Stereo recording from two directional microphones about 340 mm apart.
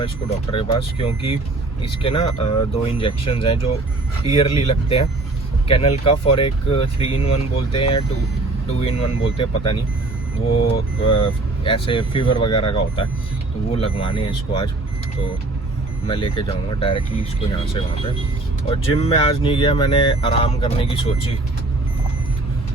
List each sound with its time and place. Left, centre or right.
0.0 s speech: centre
16.0 s speech: centre
18.6 s speech: centre